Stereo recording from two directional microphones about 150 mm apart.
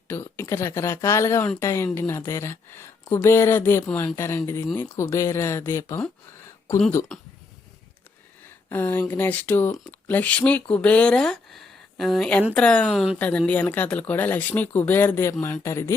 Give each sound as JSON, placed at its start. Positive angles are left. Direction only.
{"t": 0.1, "sound": "speech", "side_deg": 15}
{"t": 7.1, "sound": "speech", "side_deg": 5}
{"t": 8.7, "sound": "speech", "side_deg": 15}